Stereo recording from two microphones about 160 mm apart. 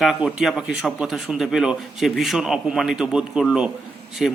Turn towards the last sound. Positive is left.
turn(degrees=0)  # may be behind; listen again after turning